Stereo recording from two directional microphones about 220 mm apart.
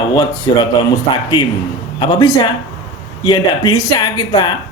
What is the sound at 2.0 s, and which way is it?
Speech, 20° left (ahead or behind).